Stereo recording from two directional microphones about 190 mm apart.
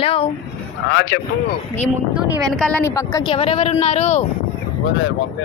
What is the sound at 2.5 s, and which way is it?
Speech, 5° left (ahead or behind).